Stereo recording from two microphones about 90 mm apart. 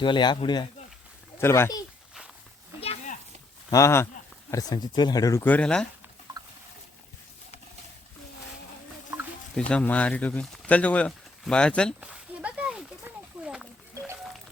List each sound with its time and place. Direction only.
0.0 s speech: 60° left (ahead or behind)
1.4 s speech: 30° left (ahead or behind)
3.7 s speech: 35° left (ahead or behind)
4.5 s speech: 50° left (ahead or behind)
5.4 s speech: 20° left (ahead or behind)
5.6 s speech: 10° left (ahead or behind)
9.1 s a sound: 20° right (ahead or behind)
9.6 s speech: 10° left (ahead or behind)
11.9 s a sound: 15° right (ahead or behind)